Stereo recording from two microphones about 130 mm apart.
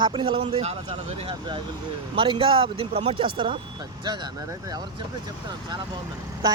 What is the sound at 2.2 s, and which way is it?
Speech, 40° right (ahead or behind).